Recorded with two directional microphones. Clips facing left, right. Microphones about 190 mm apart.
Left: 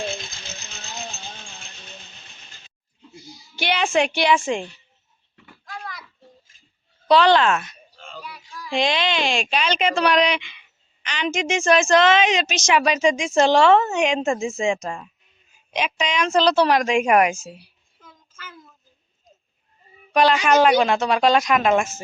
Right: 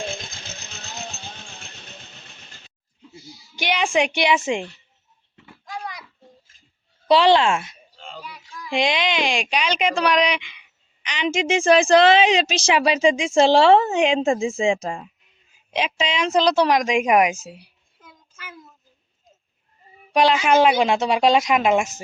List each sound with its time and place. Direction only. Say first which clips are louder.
3.5 s a woman's voice: even; 15° right (ahead or behind)
5.6 s a sound: right 3 dB; 15° right (ahead or behind)
7.1 s a woman's voice: even; 25° right (ahead or behind)
14.8 s a woman's voice: right 2 dB; 15° right (ahead or behind)
15.7 s a woman's voice: even; 25° right (ahead or behind)
17.5 s a sound: even; 15° right (ahead or behind)
20.1 s a woman's voice: even; 20° right (ahead or behind)